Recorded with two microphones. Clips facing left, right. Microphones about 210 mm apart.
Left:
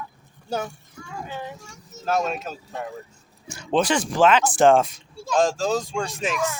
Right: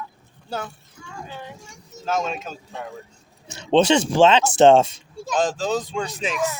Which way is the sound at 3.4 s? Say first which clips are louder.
Right 5 dB; 20° right (ahead or behind).